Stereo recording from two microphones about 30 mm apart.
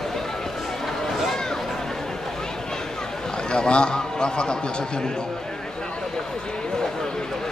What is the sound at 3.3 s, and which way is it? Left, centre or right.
A man's voice, left.